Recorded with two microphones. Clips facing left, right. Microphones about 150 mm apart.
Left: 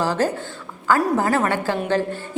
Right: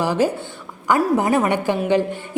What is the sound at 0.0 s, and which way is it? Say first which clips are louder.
A woman's voice: right 2 dB; 15° right (ahead or behind).